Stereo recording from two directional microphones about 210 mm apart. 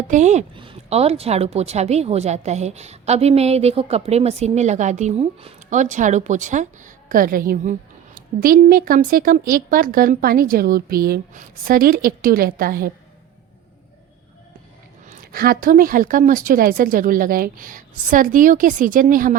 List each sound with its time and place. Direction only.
0.1 s a woman's voice: 35° right (ahead or behind)
15.0 s a woman's voice: 40° right (ahead or behind)